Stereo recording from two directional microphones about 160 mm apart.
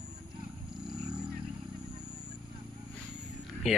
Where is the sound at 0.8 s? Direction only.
5° right (ahead or behind).